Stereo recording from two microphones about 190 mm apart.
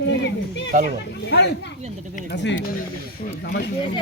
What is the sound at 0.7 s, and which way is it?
Speech, 40° right (ahead or behind).